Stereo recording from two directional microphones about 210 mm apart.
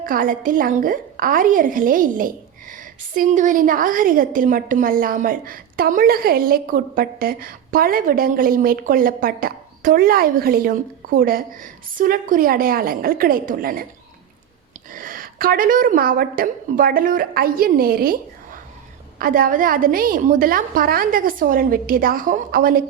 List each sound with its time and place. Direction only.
0.0 s a woman's voice: 40° right (ahead or behind)
14.9 s a woman's voice: 40° right (ahead or behind)
19.2 s a woman's voice: 40° right (ahead or behind)